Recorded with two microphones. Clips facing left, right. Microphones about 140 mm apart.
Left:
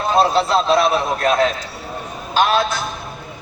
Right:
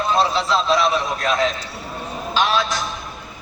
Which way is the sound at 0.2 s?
50° left (ahead or behind).